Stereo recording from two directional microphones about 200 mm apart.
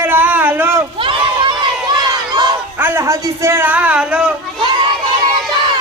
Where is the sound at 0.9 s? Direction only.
25° right (ahead or behind).